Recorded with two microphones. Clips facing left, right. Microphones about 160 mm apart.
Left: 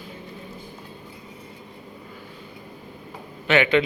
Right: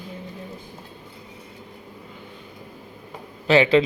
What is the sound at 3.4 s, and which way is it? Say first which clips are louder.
Speech: right 3 dB; 30° right (ahead or behind).